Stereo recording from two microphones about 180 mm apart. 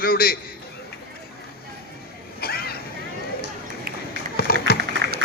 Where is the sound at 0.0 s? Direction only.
55° left (ahead or behind).